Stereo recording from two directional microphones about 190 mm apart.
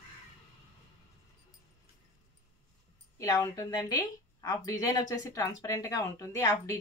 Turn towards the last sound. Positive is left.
turn(degrees=15)  # may be behind; listen again after turning